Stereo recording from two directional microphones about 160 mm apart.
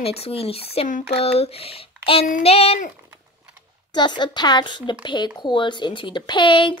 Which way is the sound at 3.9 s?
30° left (ahead or behind).